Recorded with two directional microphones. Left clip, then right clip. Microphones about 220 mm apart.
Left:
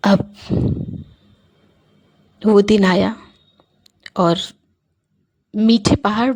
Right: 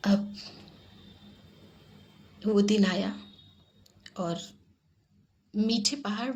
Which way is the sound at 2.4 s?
45° left (ahead or behind).